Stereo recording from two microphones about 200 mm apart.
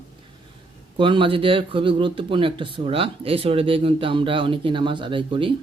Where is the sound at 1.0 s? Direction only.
25° right (ahead or behind).